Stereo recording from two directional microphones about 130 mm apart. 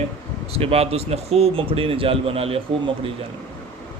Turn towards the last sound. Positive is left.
turn(degrees=-45)  # may be behind; listen again after turning